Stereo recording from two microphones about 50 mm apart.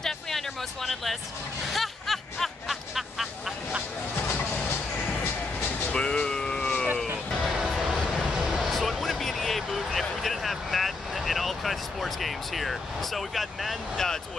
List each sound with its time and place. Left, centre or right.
0.0 s a sound: centre
5.9 s music: centre
7.4 s music: centre
8.5 s vehicle: centre